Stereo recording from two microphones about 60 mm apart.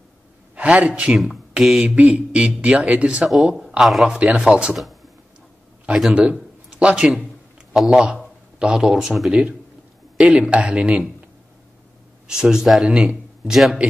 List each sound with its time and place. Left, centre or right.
0.6 s a man's voice: right
1.1 s speech: centre
2.0 s speech: right
3.4 s speech: centre
5.9 s a man's voice: centre
6.8 s a man's voice: centre
12.3 s speech: centre
13.5 s speech: centre